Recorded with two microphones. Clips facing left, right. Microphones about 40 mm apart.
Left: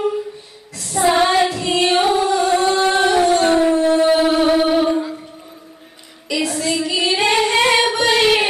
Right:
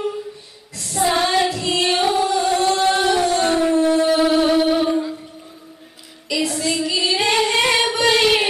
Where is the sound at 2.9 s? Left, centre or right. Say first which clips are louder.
Left 3 dB; centre.